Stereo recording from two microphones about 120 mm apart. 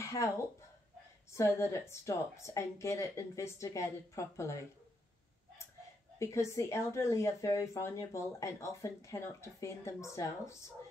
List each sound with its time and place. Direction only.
0.0 s a woman's voice: 25° left (ahead or behind)
6.1 s a woman's voice: 25° left (ahead or behind)